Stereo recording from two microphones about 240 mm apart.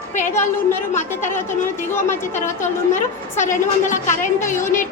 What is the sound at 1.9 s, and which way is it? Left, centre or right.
Speech, centre.